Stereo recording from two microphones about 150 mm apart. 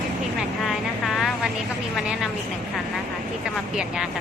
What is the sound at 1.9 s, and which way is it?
Speech, centre (ahead or behind).